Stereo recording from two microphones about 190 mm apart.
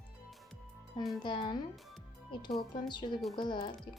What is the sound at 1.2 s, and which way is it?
Speech, 25° left (ahead or behind).